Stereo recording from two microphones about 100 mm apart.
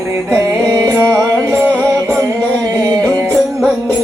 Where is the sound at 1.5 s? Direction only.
20° right (ahead or behind).